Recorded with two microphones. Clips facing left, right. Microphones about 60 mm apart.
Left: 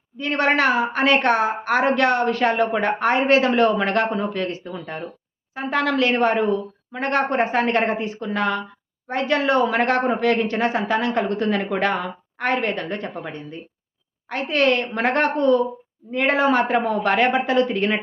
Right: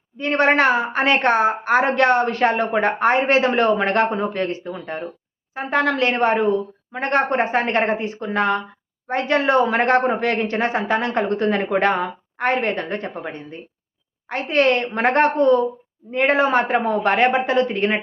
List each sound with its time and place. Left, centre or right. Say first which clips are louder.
0.2 s a woman's voice: right 3 dB; right